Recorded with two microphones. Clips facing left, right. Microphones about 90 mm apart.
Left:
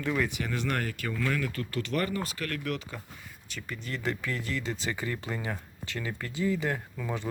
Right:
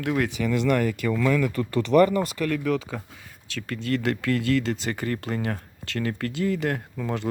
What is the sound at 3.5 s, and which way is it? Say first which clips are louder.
Speech: right 10 dB; 90° right.